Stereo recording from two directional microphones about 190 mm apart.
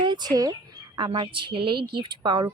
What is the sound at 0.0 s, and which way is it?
Speech, 25° right (ahead or behind).